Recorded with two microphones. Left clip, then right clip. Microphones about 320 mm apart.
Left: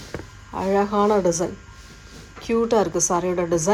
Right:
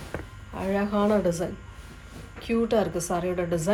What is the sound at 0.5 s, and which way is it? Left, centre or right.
A woman's voice, centre.